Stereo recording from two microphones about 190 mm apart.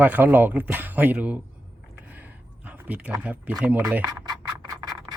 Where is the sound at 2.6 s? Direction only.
10° right (ahead or behind).